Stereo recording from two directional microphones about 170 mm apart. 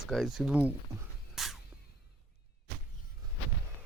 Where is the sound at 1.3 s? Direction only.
Centre (ahead or behind).